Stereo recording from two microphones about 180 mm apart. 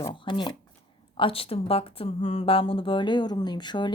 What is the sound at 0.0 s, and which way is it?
Speech, 25° left (ahead or behind).